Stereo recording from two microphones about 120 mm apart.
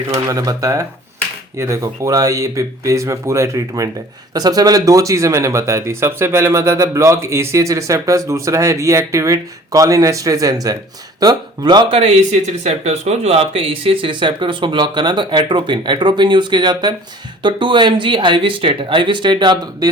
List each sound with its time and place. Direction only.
0.1 s speech: 30° right (ahead or behind)